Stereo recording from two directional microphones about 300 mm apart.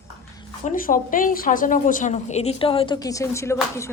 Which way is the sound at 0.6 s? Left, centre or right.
Left.